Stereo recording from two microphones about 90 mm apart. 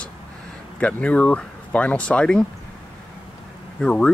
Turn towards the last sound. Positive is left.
turn(degrees=10)  # may be behind; listen again after turning